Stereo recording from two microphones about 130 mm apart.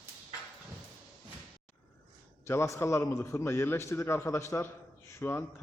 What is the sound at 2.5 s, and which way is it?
A man's voice, 20° left (ahead or behind).